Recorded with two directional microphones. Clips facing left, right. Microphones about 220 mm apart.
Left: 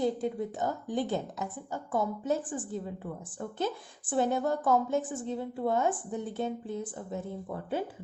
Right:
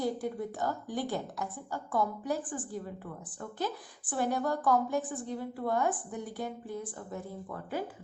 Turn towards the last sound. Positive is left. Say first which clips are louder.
# left 3 dB
turn(degrees=25)  # may be behind; listen again after turning